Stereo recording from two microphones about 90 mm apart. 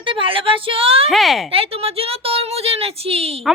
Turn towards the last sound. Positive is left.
turn(degrees=-90)